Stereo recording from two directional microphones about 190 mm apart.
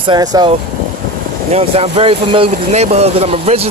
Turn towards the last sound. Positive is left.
turn(degrees=-35)  # may be behind; listen again after turning